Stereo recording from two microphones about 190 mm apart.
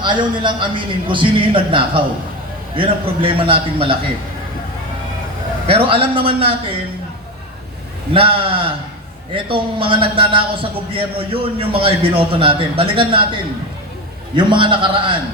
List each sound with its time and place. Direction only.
0.0 s a man's voice: 25° right (ahead or behind)
5.6 s a man's voice: 30° right (ahead or behind)
8.1 s a man's voice: 30° right (ahead or behind)
14.3 s a man's voice: 25° right (ahead or behind)